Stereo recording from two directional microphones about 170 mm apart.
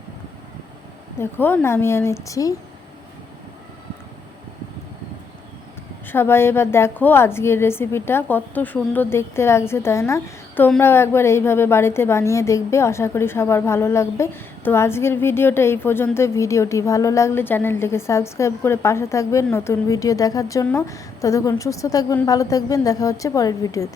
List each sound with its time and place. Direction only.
1.2 s a woman's voice: 10° left (ahead or behind)
6.1 s a woman's voice: 15° left (ahead or behind)